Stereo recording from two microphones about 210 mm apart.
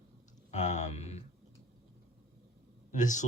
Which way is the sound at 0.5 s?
35° left (ahead or behind).